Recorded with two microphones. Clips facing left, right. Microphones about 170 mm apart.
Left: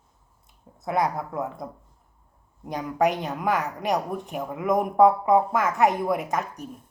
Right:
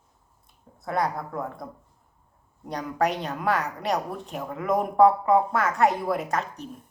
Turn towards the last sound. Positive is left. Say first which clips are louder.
# left 1 dB
turn(degrees=15)  # may be behind; listen again after turning